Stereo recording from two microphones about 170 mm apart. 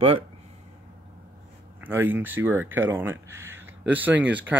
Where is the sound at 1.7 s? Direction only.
10° right (ahead or behind).